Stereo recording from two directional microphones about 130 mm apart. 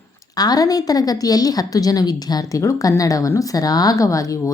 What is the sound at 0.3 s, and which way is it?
A woman's voice, 30° left (ahead or behind).